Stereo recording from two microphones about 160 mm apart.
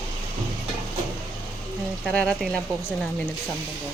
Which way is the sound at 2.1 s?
5° left (ahead or behind).